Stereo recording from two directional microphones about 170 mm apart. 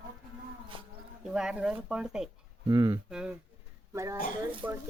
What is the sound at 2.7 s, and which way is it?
Speech, 20° right (ahead or behind).